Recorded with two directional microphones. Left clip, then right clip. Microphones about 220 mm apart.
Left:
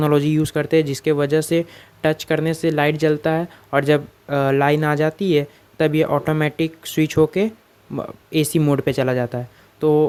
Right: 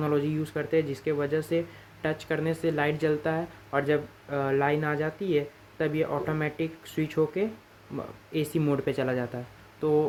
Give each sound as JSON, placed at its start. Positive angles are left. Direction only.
{"t": 0.0, "sound": "speech", "side_deg": 45}